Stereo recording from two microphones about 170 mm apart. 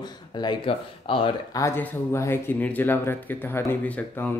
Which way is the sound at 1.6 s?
15° left (ahead or behind).